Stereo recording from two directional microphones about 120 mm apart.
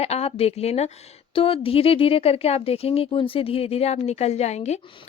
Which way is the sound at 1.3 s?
50° left (ahead or behind).